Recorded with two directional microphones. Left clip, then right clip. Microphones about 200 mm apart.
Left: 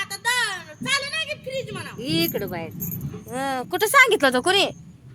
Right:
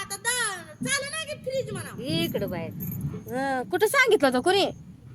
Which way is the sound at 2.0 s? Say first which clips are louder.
Left 4 dB; 55° left (ahead or behind).